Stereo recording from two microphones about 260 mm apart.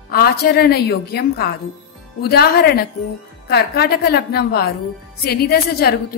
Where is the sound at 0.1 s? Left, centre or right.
Left.